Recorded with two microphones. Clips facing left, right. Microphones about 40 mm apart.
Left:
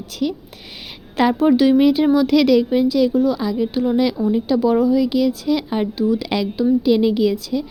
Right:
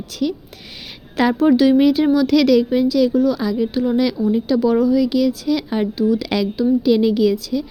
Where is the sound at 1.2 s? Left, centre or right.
Left.